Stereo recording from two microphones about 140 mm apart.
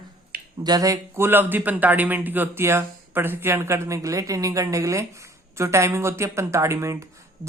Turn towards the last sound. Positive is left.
turn(degrees=-20)  # may be behind; listen again after turning